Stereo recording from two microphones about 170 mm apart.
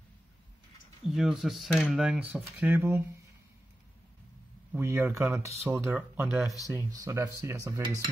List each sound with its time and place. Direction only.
1.0 s speech: centre (ahead or behind)
4.7 s speech: 15° right (ahead or behind)
6.2 s speech: centre (ahead or behind)
6.7 s speech: 15° right (ahead or behind)